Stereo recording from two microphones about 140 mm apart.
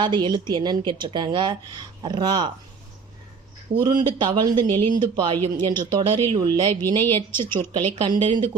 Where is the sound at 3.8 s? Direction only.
30° right (ahead or behind).